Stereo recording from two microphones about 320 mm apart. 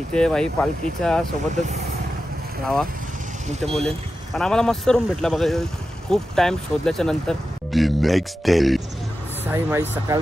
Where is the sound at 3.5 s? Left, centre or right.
Centre.